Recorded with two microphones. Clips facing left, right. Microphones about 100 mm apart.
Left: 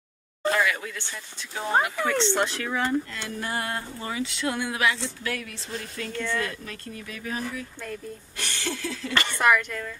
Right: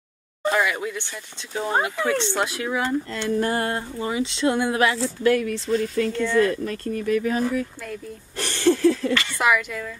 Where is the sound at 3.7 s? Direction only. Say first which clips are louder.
Right 5 dB; 20° right (ahead or behind).